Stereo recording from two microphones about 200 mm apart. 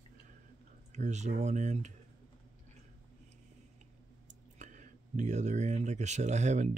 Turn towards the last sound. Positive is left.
turn(degrees=-35)  # may be behind; listen again after turning